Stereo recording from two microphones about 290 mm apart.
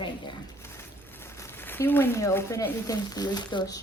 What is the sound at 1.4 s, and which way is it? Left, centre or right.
Speech, centre.